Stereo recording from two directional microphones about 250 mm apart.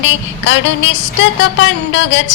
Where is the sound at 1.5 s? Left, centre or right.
Left.